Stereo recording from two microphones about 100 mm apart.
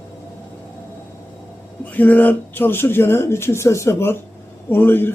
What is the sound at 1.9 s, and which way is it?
Speech, 15° left (ahead or behind).